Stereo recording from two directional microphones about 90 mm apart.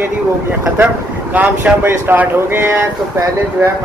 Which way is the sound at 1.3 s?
20° right (ahead or behind).